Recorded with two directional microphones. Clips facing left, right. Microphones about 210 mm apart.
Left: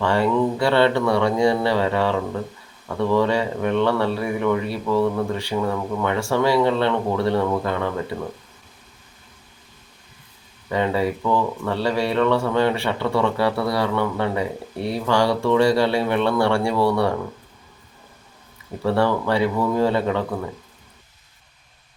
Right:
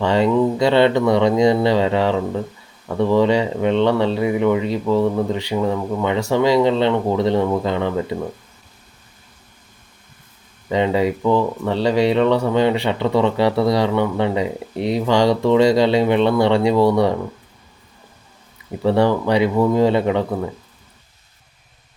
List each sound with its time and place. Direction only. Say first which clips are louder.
0.0 s speech: right 3 dB; 20° right (ahead or behind)
10.7 s speech: right 4 dB; 20° right (ahead or behind)
18.8 s speech: right 4 dB; 15° right (ahead or behind)